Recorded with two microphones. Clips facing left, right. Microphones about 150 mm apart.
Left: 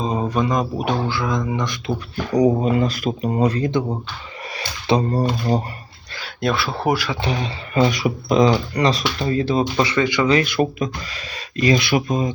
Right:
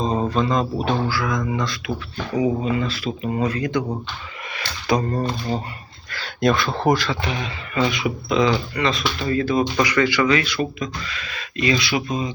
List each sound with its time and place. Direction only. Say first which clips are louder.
0.0 s speech: even; 10° left (ahead or behind)
2.3 s speech: left 4 dB; 40° left (ahead or behind)
6.2 s speech: right 2 dB; 5° left (ahead or behind)
7.2 s speech: left 3 dB; 35° left (ahead or behind)
10.4 s speech: left 5 dB; 50° left (ahead or behind)
11.1 s speech: left 1 dB; 35° left (ahead or behind)
11.8 s speech: left 4 dB; 50° left (ahead or behind)